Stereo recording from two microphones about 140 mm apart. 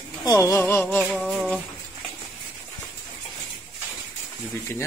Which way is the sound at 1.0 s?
5° right (ahead or behind).